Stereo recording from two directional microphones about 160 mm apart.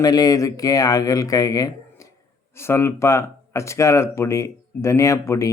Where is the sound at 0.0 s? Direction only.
25° left (ahead or behind).